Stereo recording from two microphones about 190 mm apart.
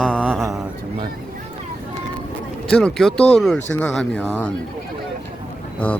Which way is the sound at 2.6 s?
5° left (ahead or behind).